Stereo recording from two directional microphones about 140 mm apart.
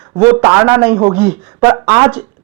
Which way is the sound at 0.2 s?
10° right (ahead or behind).